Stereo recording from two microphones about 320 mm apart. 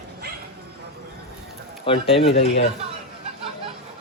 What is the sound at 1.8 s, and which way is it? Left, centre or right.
Speech, centre.